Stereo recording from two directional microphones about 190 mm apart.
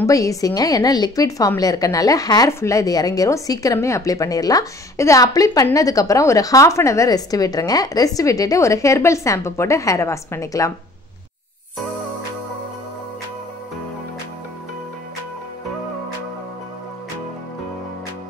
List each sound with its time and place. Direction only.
0.0 s a woman's voice: 15° left (ahead or behind)